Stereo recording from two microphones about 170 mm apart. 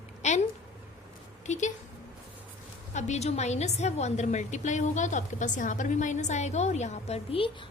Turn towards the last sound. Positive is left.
turn(degrees=35)  # may be behind; listen again after turning